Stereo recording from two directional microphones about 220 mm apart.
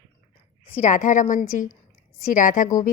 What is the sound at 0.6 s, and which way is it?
A woman's voice, 35° left (ahead or behind).